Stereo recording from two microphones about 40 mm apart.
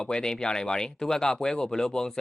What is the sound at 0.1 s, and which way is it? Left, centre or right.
Speech, centre.